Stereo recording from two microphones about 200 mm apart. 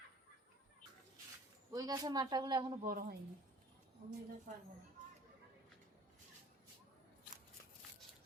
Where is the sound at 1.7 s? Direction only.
20° right (ahead or behind).